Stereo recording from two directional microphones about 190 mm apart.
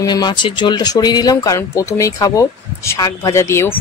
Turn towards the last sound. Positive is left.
turn(degrees=15)  # may be behind; listen again after turning